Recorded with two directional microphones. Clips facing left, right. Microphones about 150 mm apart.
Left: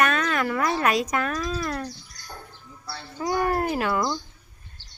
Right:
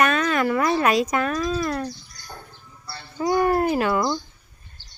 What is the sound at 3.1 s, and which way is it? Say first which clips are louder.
Speech: right 4 dB; centre (ahead or behind).